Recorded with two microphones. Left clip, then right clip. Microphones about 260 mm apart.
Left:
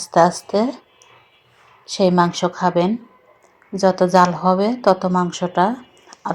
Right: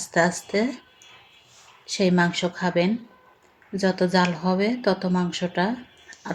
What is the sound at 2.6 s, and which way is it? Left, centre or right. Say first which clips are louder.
Speech: left 6 dB; centre.